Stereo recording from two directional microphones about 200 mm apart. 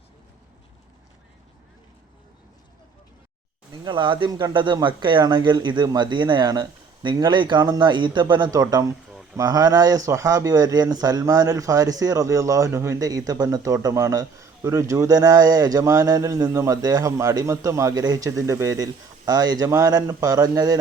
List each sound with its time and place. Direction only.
3.7 s speech: 25° right (ahead or behind)